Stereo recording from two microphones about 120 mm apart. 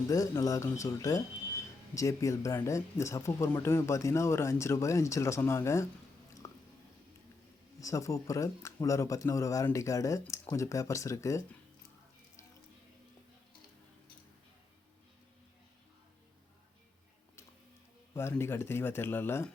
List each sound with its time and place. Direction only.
0.1 s speech: 30° left (ahead or behind)
6.4 s a sound: 25° left (ahead or behind)
7.8 s speech: 25° left (ahead or behind)
18.1 s speech: 20° left (ahead or behind)